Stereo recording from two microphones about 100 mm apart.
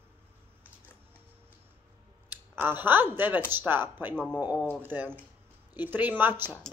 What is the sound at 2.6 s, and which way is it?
Speech, 20° right (ahead or behind).